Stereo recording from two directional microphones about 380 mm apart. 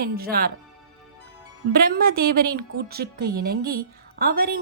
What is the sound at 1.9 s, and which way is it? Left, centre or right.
A woman's voice, right.